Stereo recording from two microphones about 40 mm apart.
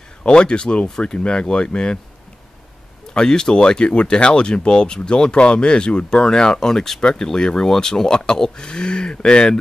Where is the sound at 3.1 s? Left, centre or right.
Centre.